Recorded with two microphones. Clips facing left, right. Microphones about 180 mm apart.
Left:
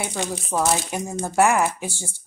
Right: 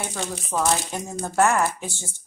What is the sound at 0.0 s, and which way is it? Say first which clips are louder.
Speech: left 3 dB; 10° left (ahead or behind).